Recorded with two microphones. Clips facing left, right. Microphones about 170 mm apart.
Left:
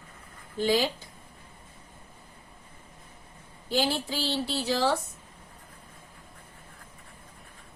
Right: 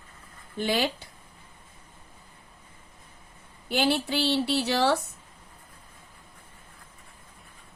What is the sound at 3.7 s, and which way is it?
A woman's voice, 70° right (ahead or behind).